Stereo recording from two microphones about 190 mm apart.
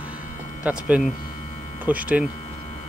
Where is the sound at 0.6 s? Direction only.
5° right (ahead or behind).